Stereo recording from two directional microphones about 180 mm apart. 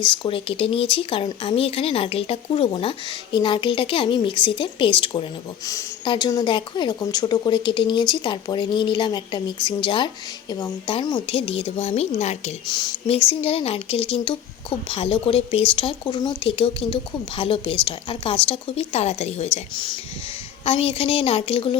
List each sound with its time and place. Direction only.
0.0 s speech: 30° left (ahead or behind)
12.6 s speech: 25° left (ahead or behind)